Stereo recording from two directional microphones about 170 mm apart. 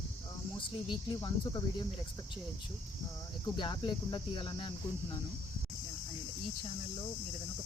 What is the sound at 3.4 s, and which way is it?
Speech, 25° left (ahead or behind).